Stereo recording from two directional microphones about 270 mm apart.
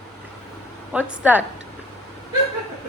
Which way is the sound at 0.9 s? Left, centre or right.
Centre.